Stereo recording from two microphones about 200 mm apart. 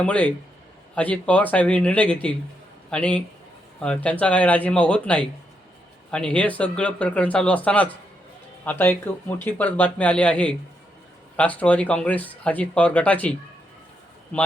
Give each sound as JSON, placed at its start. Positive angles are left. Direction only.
{"t": 0.0, "sound": "a man's voice", "side_deg": 5}
{"t": 14.3, "sound": "speech", "side_deg": 5}